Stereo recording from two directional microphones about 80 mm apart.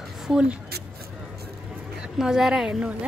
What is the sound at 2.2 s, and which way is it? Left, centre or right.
Speech, centre.